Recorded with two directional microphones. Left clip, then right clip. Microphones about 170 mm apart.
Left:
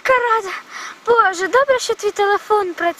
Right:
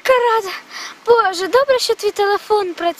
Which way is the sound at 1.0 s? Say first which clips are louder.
Right 1 dB; 15° right (ahead or behind).